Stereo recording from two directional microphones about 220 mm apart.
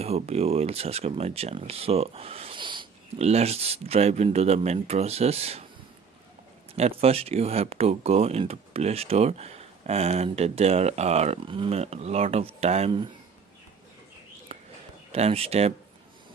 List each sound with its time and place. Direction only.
0.0 s speech: 30° right (ahead or behind)
6.7 s speech: 25° right (ahead or behind)
14.5 s a sound: 25° right (ahead or behind)
15.1 s speech: 25° right (ahead or behind)